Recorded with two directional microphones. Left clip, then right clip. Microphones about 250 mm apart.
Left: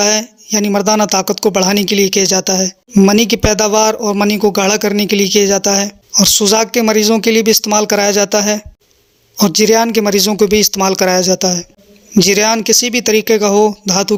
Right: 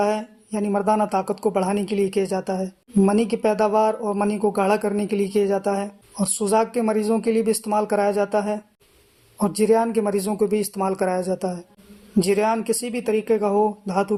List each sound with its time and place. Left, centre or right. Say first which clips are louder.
0.0 s speech: left 8 dB; left